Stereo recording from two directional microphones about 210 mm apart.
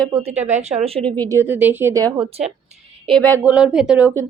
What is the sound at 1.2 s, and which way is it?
A woman's voice, 10° right (ahead or behind).